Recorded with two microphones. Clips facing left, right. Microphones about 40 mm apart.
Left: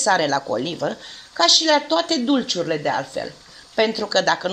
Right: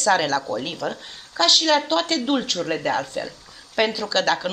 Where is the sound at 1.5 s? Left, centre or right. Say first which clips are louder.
Even; centre.